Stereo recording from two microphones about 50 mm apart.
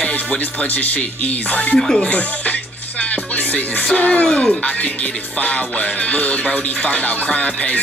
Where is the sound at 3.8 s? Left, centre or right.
Left.